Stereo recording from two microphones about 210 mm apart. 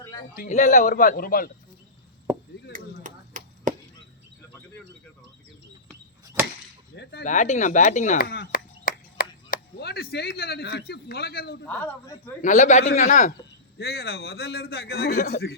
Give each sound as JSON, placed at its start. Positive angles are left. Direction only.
{"t": 0.3, "sound": "a man's voice", "side_deg": 35}
{"t": 2.3, "sound": "chop", "side_deg": -15}
{"t": 2.7, "sound": "chop", "side_deg": -40}
{"t": 6.9, "sound": "a man's voice", "side_deg": 55}
{"t": 7.3, "sound": "a man's voice", "side_deg": 35}
{"t": 11.7, "sound": "a man's voice", "side_deg": 5}
{"t": 12.4, "sound": "a man's voice", "side_deg": 35}
{"t": 13.7, "sound": "a man's voice", "side_deg": 50}